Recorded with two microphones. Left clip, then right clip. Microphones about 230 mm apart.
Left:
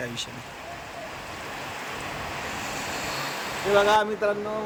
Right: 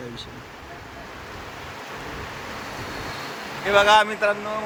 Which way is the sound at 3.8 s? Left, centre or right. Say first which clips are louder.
Right 5 dB; centre.